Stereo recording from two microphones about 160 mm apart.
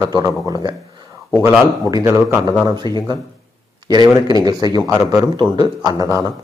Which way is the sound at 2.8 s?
25° left (ahead or behind).